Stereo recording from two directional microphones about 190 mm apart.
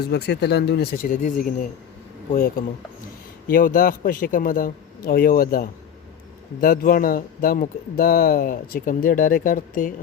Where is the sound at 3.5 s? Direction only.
45° left (ahead or behind).